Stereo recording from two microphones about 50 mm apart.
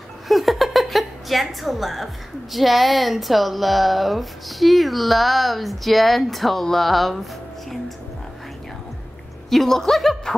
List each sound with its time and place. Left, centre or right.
0.3 s a sound: centre
2.5 s speech: centre
9.5 s speech: centre